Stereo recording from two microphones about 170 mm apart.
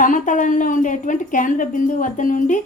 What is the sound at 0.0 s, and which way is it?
A woman's voice, 50° left (ahead or behind).